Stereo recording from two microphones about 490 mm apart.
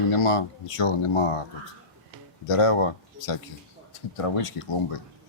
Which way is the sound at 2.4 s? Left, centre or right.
Left.